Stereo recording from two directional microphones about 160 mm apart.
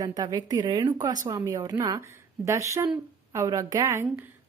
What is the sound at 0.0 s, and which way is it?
A woman's voice, 25° right (ahead or behind).